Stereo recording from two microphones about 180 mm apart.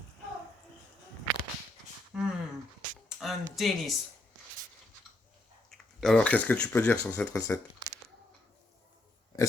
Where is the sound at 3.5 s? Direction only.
Centre (ahead or behind).